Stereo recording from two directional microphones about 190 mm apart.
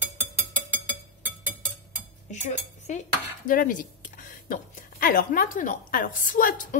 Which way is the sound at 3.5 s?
45° left (ahead or behind).